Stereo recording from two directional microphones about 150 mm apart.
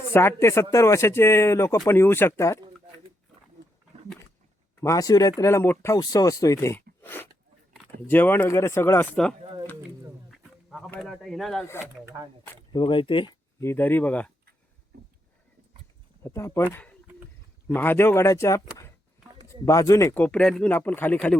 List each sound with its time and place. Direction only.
0.1 s speech: 15° left (ahead or behind)
4.8 s speech: 20° left (ahead or behind)
9.4 s a sound: 40° right (ahead or behind)
10.3 s a sound: centre (ahead or behind)
11.0 s speech: centre (ahead or behind)
12.0 s speech: 20° right (ahead or behind)
12.7 s speech: 35° left (ahead or behind)
13.6 s speech: 15° left (ahead or behind)
16.2 s speech: 15° left (ahead or behind)
17.7 s speech: 15° left (ahead or behind)